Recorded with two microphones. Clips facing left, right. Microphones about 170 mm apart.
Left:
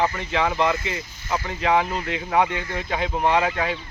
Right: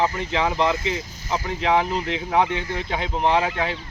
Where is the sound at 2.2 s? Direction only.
15° right (ahead or behind).